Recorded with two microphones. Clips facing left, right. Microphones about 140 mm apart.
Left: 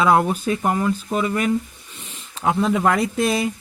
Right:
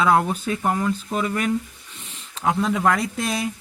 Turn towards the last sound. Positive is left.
turn(degrees=0)  # may be behind; listen again after turning